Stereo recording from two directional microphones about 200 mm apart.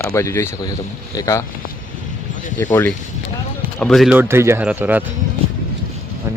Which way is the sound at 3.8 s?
Centre (ahead or behind).